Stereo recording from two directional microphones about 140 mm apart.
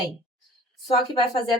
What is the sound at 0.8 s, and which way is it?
Speech, 35° left (ahead or behind).